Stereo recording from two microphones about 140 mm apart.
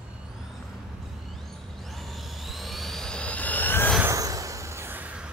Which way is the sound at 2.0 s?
Centre (ahead or behind).